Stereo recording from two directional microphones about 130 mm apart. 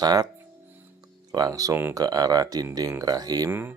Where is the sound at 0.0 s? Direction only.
30° right (ahead or behind).